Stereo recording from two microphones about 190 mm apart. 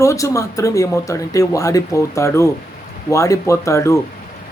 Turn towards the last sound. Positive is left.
turn(degrees=15)  # may be behind; listen again after turning